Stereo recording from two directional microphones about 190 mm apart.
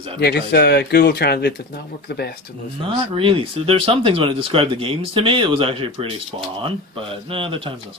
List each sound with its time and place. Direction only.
0.2 s speech: 55° left (ahead or behind)
3.2 s speech: 30° right (ahead or behind)